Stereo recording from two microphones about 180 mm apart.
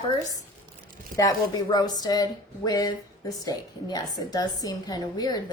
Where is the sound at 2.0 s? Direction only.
20° left (ahead or behind).